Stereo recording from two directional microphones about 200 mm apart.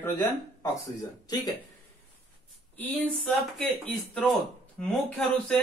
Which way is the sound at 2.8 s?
5° left (ahead or behind).